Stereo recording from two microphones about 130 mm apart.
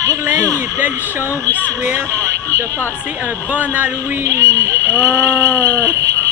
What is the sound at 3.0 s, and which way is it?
Speech, 10° right (ahead or behind).